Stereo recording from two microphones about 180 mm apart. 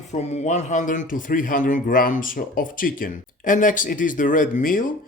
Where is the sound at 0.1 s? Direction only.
40° left (ahead or behind).